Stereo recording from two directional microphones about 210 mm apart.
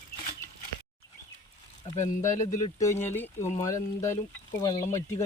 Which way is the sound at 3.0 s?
10° left (ahead or behind).